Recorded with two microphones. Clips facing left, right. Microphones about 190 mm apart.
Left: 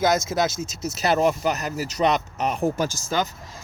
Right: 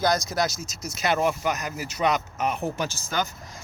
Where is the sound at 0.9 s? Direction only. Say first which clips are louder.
Left 3 dB; 35° left (ahead or behind).